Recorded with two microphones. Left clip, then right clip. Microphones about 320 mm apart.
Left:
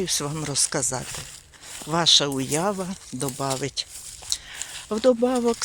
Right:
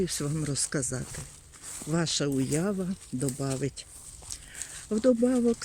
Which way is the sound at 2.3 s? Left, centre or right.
Left.